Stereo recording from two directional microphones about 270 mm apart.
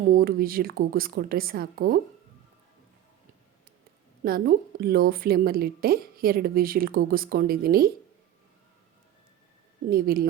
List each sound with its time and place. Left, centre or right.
0.1 s a woman's voice: right
4.2 s a woman's voice: right
9.9 s a woman's voice: right